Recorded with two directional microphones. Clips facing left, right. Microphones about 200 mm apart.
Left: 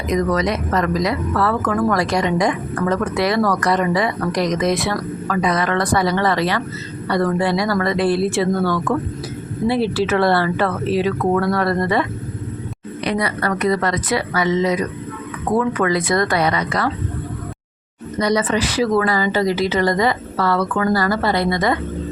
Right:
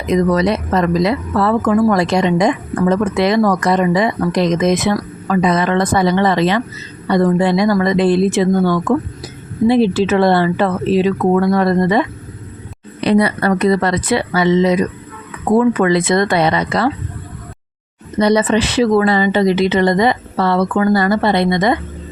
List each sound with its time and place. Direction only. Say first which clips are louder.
0.1 s speech: right 5 dB; 30° right (ahead or behind)
13.1 s speech: right 7 dB; 30° right (ahead or behind)
18.2 s speech: right 5 dB; 25° right (ahead or behind)